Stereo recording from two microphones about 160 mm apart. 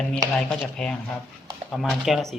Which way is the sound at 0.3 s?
5° left (ahead or behind).